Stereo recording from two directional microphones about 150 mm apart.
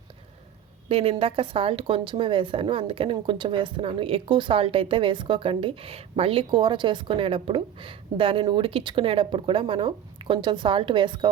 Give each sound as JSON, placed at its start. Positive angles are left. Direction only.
{"t": 0.9, "sound": "a woman's voice", "side_deg": -40}